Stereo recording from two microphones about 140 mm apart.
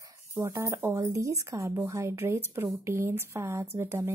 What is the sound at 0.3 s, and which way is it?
Speech, 20° right (ahead or behind).